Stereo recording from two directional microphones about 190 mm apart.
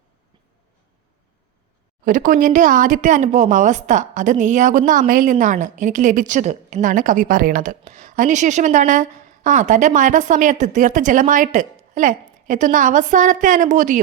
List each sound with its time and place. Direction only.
2.0 s speech: 45° right (ahead or behind)